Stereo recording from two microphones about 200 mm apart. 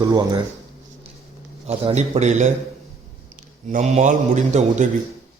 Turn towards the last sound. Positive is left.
turn(degrees=-35)  # may be behind; listen again after turning